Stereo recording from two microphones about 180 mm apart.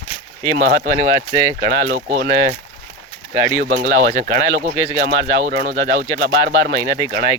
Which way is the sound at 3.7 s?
50° right (ahead or behind).